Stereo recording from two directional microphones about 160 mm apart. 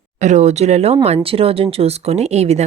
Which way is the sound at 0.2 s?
50° right (ahead or behind).